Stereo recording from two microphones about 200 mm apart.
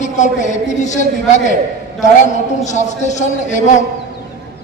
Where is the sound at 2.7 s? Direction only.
35° left (ahead or behind).